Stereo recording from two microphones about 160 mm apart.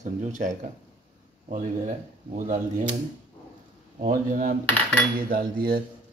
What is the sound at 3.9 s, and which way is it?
Speech, 55° right (ahead or behind).